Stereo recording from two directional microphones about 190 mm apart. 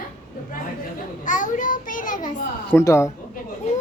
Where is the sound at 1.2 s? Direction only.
40° left (ahead or behind).